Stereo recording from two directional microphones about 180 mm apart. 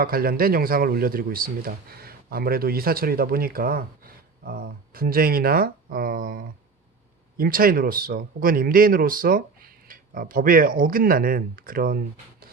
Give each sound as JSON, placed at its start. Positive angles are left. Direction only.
{"t": 0.0, "sound": "speech", "side_deg": -55}